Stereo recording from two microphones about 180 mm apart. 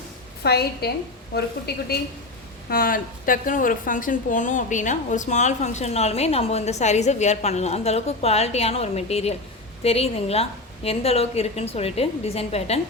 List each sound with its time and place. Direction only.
0.4 s a woman's voice: 65° left (ahead or behind); by 12.8 s 35° left (ahead or behind)